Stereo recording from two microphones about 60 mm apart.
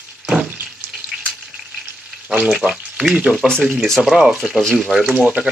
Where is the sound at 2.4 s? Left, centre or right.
Centre.